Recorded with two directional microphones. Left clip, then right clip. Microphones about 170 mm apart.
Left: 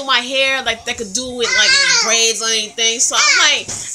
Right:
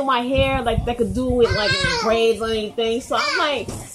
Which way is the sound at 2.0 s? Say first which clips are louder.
Left 3 dB; centre (ahead or behind).